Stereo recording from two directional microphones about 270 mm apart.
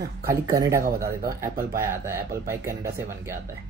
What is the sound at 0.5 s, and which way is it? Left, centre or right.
A man's voice, centre.